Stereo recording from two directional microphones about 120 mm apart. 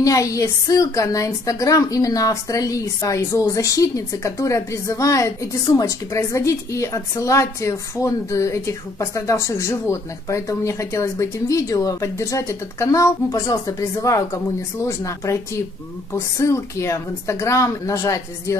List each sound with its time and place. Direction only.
0.0 s a woman's voice: 25° left (ahead or behind)